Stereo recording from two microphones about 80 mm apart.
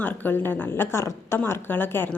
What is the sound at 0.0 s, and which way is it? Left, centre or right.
Speech, left.